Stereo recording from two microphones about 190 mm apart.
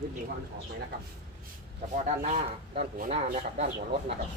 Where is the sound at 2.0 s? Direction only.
35° right (ahead or behind).